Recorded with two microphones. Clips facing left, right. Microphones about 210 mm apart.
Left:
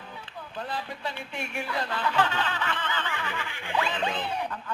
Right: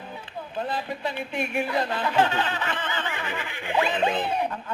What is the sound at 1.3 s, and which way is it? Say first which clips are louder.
Speech: right 8 dB; 20° right (ahead or behind).